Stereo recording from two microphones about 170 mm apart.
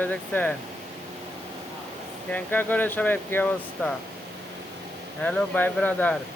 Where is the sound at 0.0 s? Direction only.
10° left (ahead or behind).